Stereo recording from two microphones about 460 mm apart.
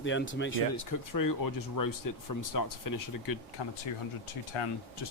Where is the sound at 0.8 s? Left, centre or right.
Left.